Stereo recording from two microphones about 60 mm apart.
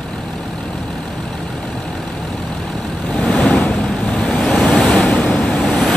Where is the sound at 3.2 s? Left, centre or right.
Centre.